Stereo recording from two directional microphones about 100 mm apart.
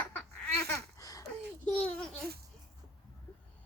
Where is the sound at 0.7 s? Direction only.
35° left (ahead or behind).